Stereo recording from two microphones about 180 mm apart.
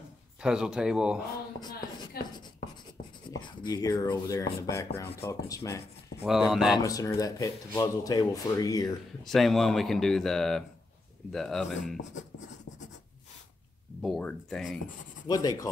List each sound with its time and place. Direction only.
0.4 s speech: 5° right (ahead or behind)
1.6 s a sound: 25° left (ahead or behind)
3.3 s speech: 25° left (ahead or behind)
6.2 s speech: centre (ahead or behind)
6.8 s speech: 20° left (ahead or behind)
9.2 s speech: centre (ahead or behind)
14.0 s speech: centre (ahead or behind)
15.2 s speech: 20° left (ahead or behind)